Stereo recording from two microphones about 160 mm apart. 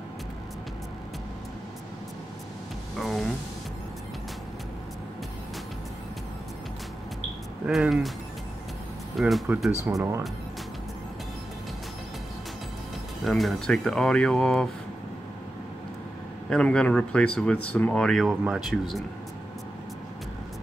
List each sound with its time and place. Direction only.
3.0 s speech: centre (ahead or behind)
7.6 s speech: 5° right (ahead or behind)
9.1 s speech: centre (ahead or behind)
9.8 s speech: 20° right (ahead or behind)
13.2 s speech: centre (ahead or behind)
16.4 s speech: 5° left (ahead or behind)